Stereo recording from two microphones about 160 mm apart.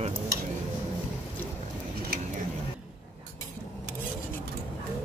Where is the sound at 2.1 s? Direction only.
75° right (ahead or behind).